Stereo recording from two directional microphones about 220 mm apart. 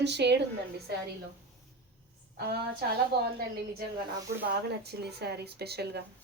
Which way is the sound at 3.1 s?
45° right (ahead or behind).